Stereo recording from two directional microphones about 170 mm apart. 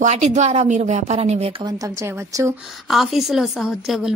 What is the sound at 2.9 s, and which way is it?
A woman's voice, centre (ahead or behind).